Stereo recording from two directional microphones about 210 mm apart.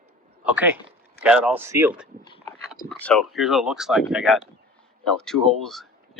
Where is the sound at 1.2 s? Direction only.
5° right (ahead or behind).